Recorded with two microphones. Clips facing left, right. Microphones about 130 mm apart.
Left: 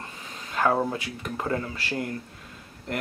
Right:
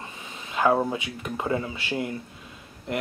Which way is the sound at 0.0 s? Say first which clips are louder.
Right 1 dB; 5° right (ahead or behind).